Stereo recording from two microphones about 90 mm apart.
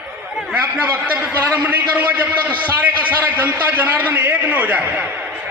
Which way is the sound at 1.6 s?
20° right (ahead or behind).